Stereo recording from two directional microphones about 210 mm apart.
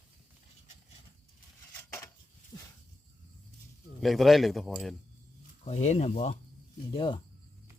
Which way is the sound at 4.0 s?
Centre (ahead or behind).